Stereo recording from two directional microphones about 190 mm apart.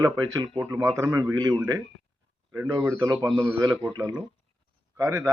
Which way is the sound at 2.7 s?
20° right (ahead or behind).